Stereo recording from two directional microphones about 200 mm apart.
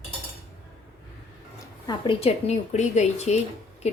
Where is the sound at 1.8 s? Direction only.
25° left (ahead or behind).